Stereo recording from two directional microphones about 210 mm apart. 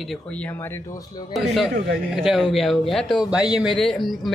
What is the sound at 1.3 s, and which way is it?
Speech, centre (ahead or behind).